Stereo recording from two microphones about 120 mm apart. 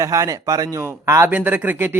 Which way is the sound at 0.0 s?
25° right (ahead or behind).